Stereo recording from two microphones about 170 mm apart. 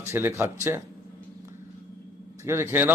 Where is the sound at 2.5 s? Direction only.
15° right (ahead or behind).